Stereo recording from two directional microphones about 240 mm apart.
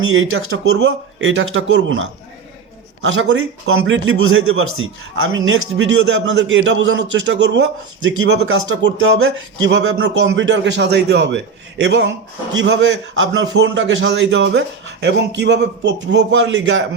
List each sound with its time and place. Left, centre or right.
0.1 s a man's voice: right